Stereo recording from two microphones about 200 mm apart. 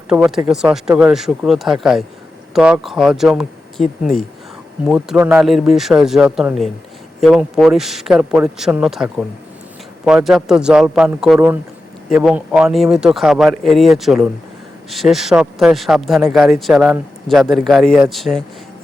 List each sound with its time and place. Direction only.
0.1 s speech: 5° right (ahead or behind)